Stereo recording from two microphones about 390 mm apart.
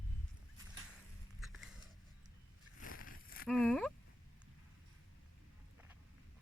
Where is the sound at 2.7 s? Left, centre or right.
Left.